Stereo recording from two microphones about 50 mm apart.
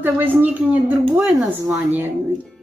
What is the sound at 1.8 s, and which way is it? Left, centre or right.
Speech, right.